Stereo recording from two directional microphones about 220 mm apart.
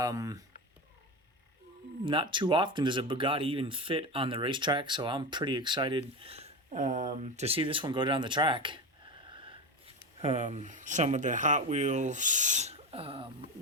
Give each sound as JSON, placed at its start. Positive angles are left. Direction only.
{"t": 0.0, "sound": "speech", "side_deg": -15}
{"t": 2.0, "sound": "speech", "side_deg": -20}
{"t": 9.3, "sound": "wheeze", "side_deg": -25}
{"t": 10.2, "sound": "speech", "side_deg": -30}